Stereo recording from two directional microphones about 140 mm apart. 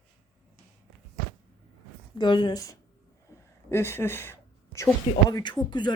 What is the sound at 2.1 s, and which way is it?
Speech, 35° left (ahead or behind).